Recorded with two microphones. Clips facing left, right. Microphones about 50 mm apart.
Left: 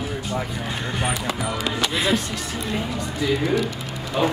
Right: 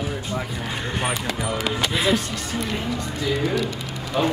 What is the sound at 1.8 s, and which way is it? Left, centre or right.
Speech, centre.